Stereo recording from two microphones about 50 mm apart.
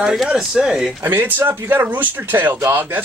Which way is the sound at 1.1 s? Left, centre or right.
Right.